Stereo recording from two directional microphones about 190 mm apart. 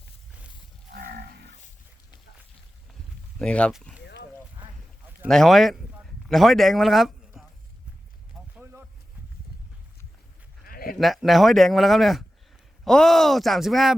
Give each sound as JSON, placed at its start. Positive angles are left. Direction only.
{"t": 0.9, "sound": "livestock", "side_deg": -55}
{"t": 3.3, "sound": "speech", "side_deg": 5}
{"t": 4.0, "sound": "a sound", "side_deg": 65}
{"t": 5.3, "sound": "speech", "side_deg": 0}
{"t": 8.5, "sound": "a sound", "side_deg": -5}
{"t": 10.7, "sound": "bleat", "side_deg": 50}
{"t": 10.9, "sound": "speech", "side_deg": 0}